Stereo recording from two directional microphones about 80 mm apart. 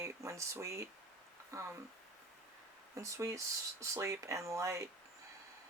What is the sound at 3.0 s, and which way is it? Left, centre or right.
Speech, right.